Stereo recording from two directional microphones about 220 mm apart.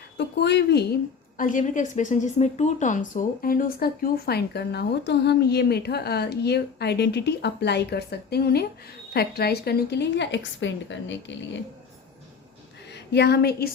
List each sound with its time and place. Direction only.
0.2 s a woman's voice: 50° left (ahead or behind)
1.4 s a woman's voice: 35° left (ahead or behind); by 11.3 s 55° left (ahead or behind)
12.9 s a woman's voice: 50° left (ahead or behind)